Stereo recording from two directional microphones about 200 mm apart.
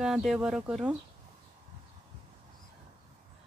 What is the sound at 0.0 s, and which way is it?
Speech, centre (ahead or behind).